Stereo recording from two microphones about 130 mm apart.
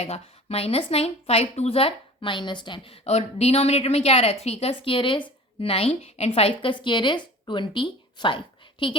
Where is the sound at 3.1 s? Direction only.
55° left (ahead or behind).